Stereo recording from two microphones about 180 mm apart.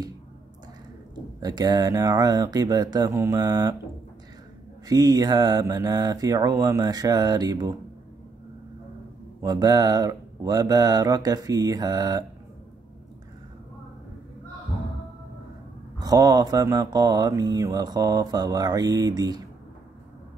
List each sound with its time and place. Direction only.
1.4 s mantra: 20° right (ahead or behind)
4.8 s mantra: 20° right (ahead or behind)
9.4 s mantra: 20° right (ahead or behind)
16.0 s mantra: 20° right (ahead or behind)